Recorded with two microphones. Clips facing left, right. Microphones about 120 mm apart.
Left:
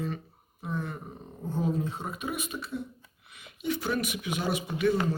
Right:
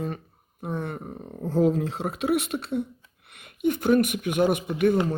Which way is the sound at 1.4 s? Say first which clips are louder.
Right 8 dB; 90° right.